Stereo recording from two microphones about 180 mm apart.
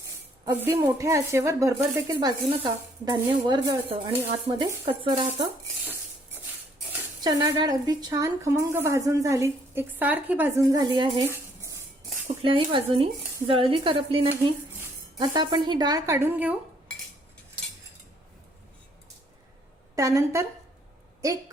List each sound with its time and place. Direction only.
0.4 s a woman's voice: 15° right (ahead or behind)
7.6 s a woman's voice: 20° right (ahead or behind)
11.3 s tambourine: 15° right (ahead or behind)
12.4 s a woman's voice: 30° right (ahead or behind); by 16.6 s 10° right (ahead or behind)
20.0 s a woman's voice: 15° right (ahead or behind)